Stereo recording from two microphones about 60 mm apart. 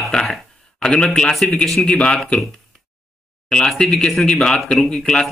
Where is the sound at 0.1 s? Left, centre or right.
Centre.